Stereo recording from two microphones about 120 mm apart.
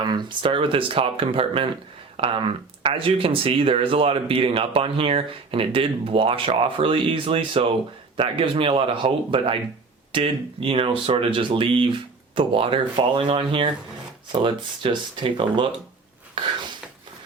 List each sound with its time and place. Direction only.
0.0 s speech: 35° right (ahead or behind)